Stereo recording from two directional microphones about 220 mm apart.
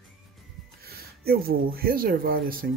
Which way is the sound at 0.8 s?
45° right (ahead or behind).